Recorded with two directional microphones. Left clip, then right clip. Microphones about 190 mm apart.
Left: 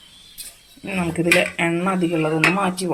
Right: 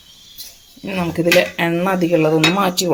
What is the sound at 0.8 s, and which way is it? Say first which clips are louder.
Dishes: right 4 dB; 20° right (ahead or behind).